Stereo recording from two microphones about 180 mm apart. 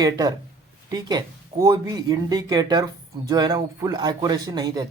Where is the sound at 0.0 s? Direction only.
20° right (ahead or behind).